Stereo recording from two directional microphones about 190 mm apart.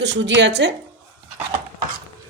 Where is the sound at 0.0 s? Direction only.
70° right (ahead or behind).